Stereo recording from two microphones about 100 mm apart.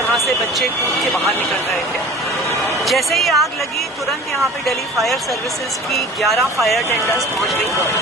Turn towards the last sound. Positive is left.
turn(degrees=30)  # may be behind; listen again after turning